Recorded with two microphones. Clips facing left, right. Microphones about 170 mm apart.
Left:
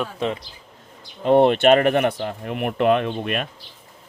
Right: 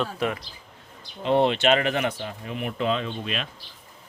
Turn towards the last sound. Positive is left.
turn(degrees=55)  # may be behind; listen again after turning